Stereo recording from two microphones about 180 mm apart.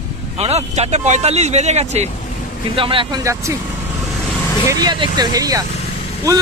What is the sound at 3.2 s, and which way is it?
Speech, 15° right (ahead or behind).